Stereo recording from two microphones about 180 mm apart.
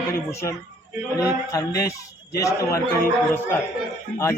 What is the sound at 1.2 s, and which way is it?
A man's voice, 20° left (ahead or behind).